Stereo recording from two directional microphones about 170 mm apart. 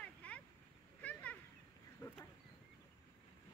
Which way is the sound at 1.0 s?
10° left (ahead or behind).